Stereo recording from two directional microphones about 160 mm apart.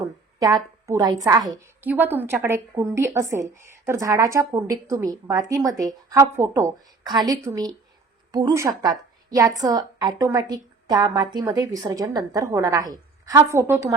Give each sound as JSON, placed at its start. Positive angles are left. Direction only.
{"t": 0.3, "sound": "a woman's voice", "side_deg": -25}
{"t": 1.6, "sound": "a woman's voice", "side_deg": -10}